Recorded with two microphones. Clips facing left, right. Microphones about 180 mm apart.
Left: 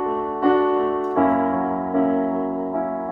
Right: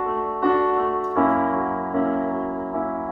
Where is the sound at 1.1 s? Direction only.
15° left (ahead or behind).